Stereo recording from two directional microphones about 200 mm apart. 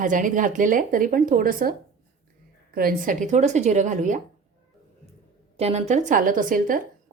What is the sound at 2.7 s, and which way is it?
Speech, 45° right (ahead or behind).